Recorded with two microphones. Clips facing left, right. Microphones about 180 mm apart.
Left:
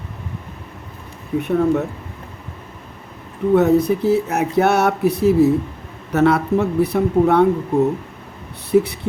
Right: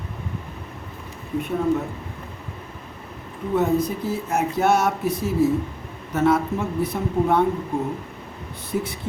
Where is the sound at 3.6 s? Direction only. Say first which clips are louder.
Left 6 dB; 65° left (ahead or behind).